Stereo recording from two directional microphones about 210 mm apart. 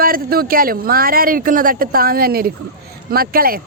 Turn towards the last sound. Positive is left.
turn(degrees=-45)  # may be behind; listen again after turning